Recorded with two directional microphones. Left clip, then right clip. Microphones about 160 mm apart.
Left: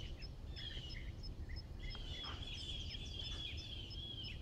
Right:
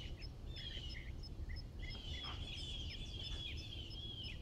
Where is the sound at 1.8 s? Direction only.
50° right (ahead or behind).